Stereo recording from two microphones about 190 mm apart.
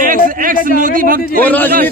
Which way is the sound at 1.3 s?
10° left (ahead or behind).